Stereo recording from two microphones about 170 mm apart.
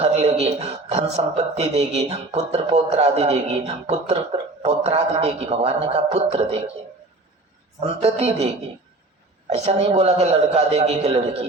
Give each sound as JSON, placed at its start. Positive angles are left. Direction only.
{"t": 0.0, "sound": "a man's voice", "side_deg": -40}
{"t": 7.8, "sound": "a man's voice", "side_deg": -35}
{"t": 9.5, "sound": "a man's voice", "side_deg": -40}